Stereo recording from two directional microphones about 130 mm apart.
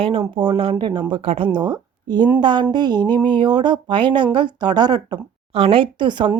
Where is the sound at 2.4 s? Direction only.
35° right (ahead or behind).